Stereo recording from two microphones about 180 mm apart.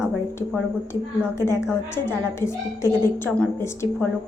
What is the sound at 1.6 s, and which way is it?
A woman's voice, 15° left (ahead or behind).